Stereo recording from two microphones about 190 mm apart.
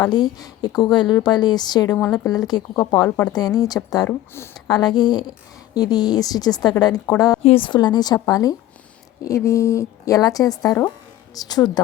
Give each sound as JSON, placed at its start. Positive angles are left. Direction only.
{"t": 0.1, "sound": "a woman's voice", "side_deg": 20}
{"t": 2.0, "sound": "speech", "side_deg": 5}
{"t": 2.2, "sound": "a woman's voice", "side_deg": 20}